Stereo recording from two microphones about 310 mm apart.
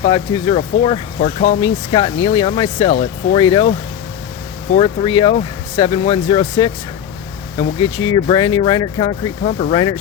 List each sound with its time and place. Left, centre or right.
0.0 s speech: centre
4.8 s speech: centre
7.8 s speech: left
8.0 s speech: centre